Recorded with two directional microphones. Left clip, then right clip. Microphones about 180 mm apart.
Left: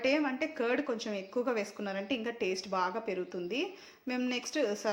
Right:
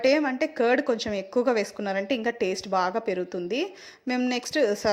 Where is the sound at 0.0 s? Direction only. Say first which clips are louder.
Right 8 dB; 35° right (ahead or behind).